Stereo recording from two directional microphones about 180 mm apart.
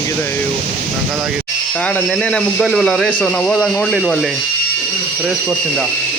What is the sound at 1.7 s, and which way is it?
Speech, 10° left (ahead or behind).